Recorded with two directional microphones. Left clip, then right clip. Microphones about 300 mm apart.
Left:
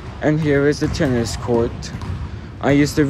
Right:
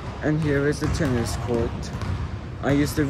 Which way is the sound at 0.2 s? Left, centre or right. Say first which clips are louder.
Left 7 dB; centre.